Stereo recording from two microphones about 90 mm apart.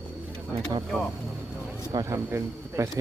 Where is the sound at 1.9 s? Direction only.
35° right (ahead or behind).